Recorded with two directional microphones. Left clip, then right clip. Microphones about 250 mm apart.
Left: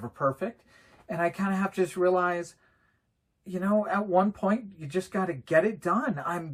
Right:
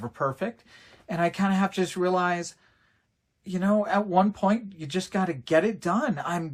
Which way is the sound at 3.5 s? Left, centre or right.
Centre.